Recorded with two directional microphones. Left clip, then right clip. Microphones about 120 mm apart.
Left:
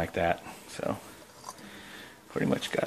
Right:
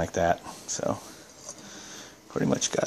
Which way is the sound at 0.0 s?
40° right (ahead or behind).